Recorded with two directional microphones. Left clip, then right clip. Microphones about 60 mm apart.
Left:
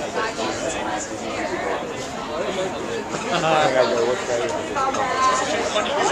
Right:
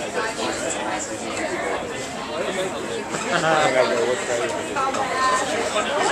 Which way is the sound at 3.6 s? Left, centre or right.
Left.